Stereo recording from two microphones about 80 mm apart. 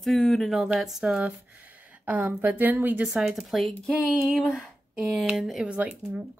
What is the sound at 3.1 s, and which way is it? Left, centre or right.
Speech, centre.